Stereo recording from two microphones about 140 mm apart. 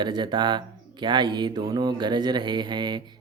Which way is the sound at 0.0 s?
30° right (ahead or behind).